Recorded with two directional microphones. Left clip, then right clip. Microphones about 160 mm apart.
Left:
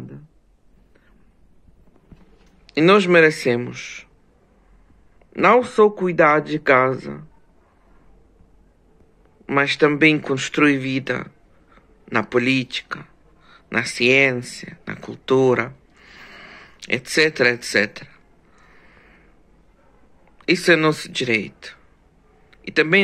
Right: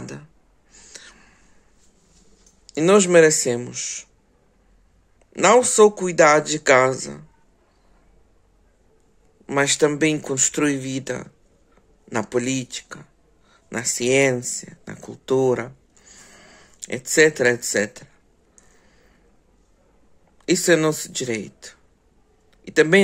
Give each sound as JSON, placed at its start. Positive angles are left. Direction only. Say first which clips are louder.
{"t": 2.6, "sound": "speech", "louder": "left 2 dB", "side_deg": -20}
{"t": 5.3, "sound": "speech", "louder": "even", "side_deg": -25}
{"t": 9.5, "sound": "speech", "louder": "left 2 dB", "side_deg": -30}
{"t": 20.3, "sound": "speech", "louder": "left 2 dB", "side_deg": -30}